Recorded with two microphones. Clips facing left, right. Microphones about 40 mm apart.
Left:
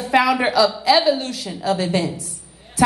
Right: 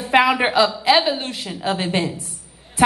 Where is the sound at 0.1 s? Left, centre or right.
Right.